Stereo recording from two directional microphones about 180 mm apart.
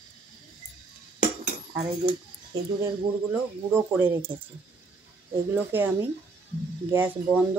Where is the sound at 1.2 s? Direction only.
40° right (ahead or behind).